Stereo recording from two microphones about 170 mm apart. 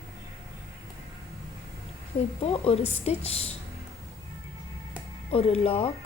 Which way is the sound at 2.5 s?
35° left (ahead or behind).